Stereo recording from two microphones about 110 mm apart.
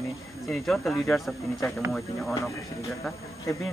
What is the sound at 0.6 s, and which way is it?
Speech, 5° left (ahead or behind).